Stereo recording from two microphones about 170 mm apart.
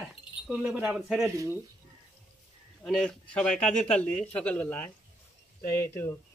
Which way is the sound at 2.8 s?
Centre (ahead or behind).